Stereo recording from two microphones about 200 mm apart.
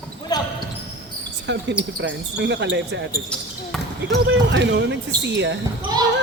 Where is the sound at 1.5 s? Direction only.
65° right (ahead or behind).